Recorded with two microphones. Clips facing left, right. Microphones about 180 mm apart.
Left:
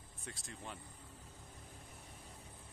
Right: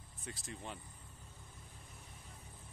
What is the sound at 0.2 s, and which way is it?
Speech, centre (ahead or behind).